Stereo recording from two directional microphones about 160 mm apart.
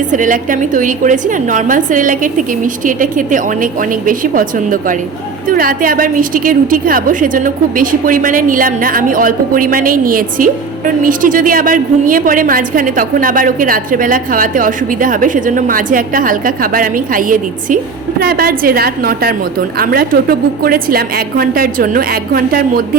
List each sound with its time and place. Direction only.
0.1 s a woman's voice: 55° right (ahead or behind)
18.2 s a woman's voice: 70° right (ahead or behind)